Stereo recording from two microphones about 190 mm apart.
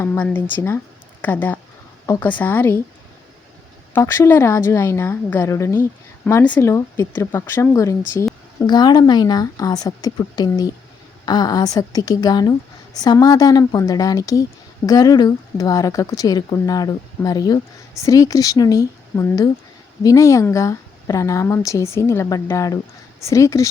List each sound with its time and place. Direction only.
0.0 s a woman's voice: 10° left (ahead or behind)
3.9 s a woman's voice: 15° left (ahead or behind)